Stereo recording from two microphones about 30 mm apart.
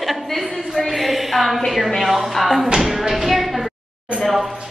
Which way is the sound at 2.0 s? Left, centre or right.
Centre.